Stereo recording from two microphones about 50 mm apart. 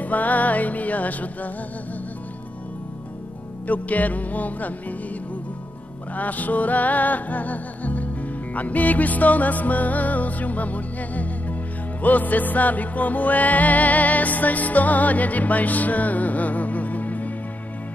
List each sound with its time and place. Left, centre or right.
0.0 s music: left
3.6 s music: left
6.1 s music: left